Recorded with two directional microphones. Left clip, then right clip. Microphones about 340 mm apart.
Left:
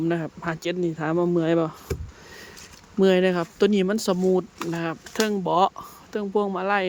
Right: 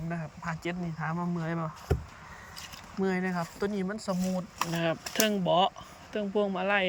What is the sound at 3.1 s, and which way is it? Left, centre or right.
Speech, left.